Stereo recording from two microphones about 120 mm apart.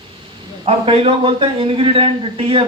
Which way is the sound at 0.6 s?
55° right (ahead or behind).